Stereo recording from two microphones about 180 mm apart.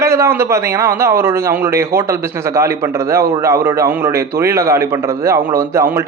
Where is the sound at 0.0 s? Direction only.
15° right (ahead or behind).